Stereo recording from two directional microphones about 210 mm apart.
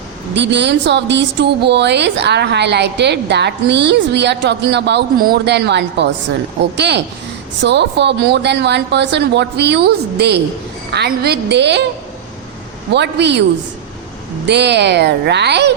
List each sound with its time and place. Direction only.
0.3 s a woman's voice: 55° right (ahead or behind)
12.9 s speech: 55° right (ahead or behind)
14.4 s speech: 55° right (ahead or behind)